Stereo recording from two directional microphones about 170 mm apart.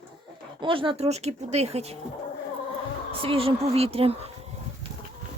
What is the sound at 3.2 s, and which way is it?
Speech, 35° right (ahead or behind).